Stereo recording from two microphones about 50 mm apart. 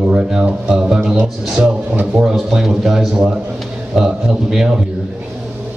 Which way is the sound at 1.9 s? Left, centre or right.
Right.